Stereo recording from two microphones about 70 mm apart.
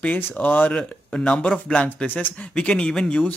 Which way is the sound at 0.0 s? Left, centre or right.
Left.